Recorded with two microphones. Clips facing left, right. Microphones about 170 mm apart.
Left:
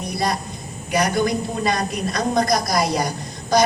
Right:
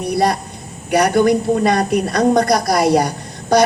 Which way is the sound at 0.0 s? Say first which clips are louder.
Right 7 dB; 65° right (ahead or behind).